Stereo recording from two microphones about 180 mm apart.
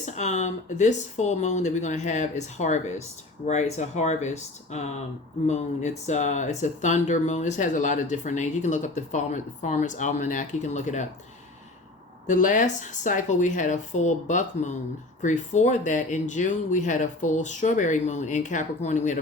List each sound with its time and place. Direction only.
0.0 s speech: 40° left (ahead or behind)
12.3 s speech: 45° left (ahead or behind)